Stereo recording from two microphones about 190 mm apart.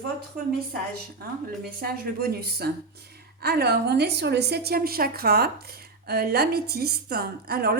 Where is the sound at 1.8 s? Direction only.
55° right (ahead or behind).